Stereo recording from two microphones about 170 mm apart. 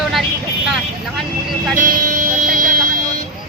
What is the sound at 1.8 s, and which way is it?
Music, 55° right (ahead or behind).